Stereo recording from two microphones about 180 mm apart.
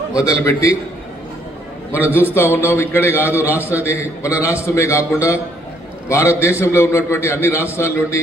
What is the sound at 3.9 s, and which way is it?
A man's voice, 15° left (ahead or behind).